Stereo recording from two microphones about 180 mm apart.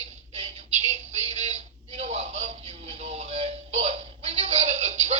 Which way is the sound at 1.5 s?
35° right (ahead or behind).